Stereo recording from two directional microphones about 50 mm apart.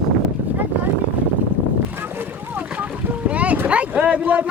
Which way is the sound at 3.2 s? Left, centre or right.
Right.